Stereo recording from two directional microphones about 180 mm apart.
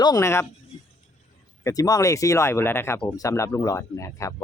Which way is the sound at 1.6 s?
20° left (ahead or behind).